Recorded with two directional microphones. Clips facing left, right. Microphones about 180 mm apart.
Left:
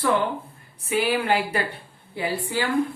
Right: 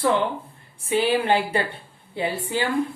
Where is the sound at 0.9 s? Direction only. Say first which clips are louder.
Right 2 dB; 30° right (ahead or behind).